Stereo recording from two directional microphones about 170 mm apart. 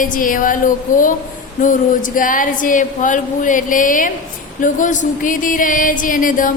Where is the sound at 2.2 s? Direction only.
50° left (ahead or behind).